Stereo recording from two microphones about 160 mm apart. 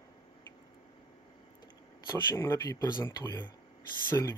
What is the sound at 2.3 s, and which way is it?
Speech, 20° left (ahead or behind).